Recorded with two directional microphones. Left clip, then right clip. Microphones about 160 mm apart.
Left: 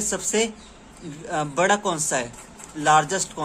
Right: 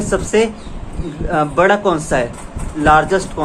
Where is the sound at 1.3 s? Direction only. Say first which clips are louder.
Right 8 dB; 30° left (ahead or behind).